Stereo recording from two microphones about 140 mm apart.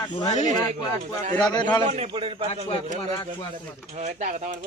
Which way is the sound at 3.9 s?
55° right (ahead or behind).